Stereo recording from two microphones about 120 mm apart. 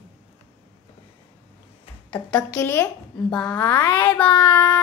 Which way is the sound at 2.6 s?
20° left (ahead or behind).